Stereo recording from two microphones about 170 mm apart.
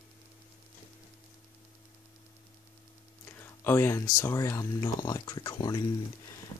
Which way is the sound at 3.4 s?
15° left (ahead or behind).